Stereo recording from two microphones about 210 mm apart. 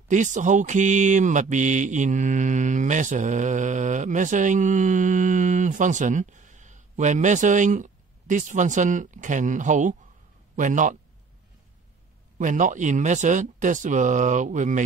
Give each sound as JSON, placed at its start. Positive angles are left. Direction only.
{"t": 0.1, "sound": "a man's voice", "side_deg": -35}
{"t": 12.4, "sound": "speech", "side_deg": -35}